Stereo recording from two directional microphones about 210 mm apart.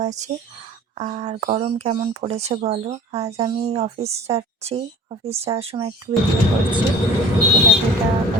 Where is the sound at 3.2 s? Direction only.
20° right (ahead or behind).